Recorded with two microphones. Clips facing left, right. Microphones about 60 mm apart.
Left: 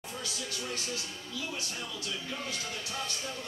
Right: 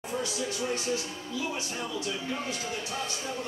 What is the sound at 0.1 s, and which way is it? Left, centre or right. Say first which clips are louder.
Speech: right 8 dB; right.